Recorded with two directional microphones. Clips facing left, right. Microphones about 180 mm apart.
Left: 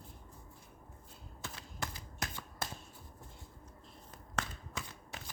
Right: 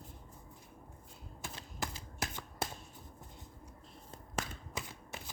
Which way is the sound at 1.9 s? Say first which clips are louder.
Right 2 dB; 25° right (ahead or behind).